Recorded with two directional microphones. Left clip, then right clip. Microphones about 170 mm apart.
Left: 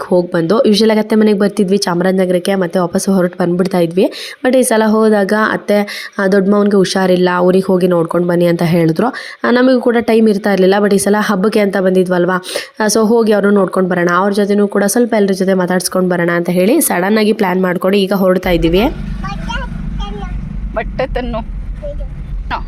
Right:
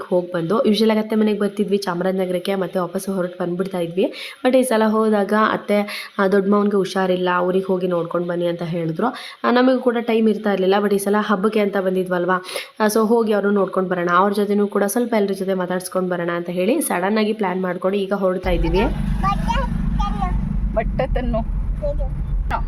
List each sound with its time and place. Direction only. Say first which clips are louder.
0.1 s speech: left 7 dB; 35° left (ahead or behind)
14.3 s speech: left 6 dB; 25° left (ahead or behind)
20.7 s speech: left 4 dB; 10° left (ahead or behind)